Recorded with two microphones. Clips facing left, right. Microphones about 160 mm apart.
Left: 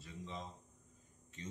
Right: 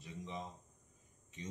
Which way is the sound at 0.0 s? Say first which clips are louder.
Right 2 dB; 15° right (ahead or behind).